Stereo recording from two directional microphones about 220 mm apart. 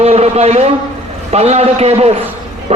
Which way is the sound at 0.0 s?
30° right (ahead or behind).